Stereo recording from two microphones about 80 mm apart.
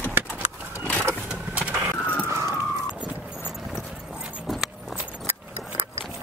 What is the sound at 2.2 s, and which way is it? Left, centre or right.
Emergency vehicle, right.